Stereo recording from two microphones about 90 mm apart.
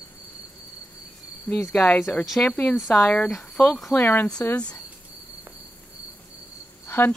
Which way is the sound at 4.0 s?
20° left (ahead or behind).